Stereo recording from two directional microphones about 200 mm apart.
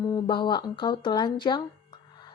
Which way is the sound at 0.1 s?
25° left (ahead or behind).